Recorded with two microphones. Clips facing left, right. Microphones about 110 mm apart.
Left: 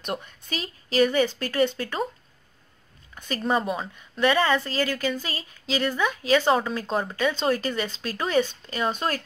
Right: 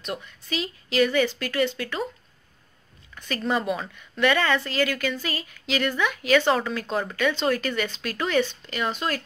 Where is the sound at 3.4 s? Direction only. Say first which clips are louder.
Left 1 dB; 35° left (ahead or behind).